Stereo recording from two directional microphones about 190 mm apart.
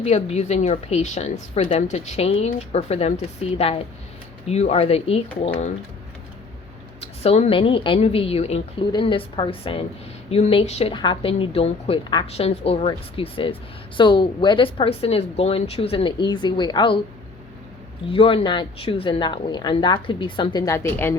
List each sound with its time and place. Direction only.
0.0 s a woman's voice: 35° left (ahead or behind)
7.0 s a woman's voice: 30° left (ahead or behind)
18.1 s a woman's voice: 30° left (ahead or behind)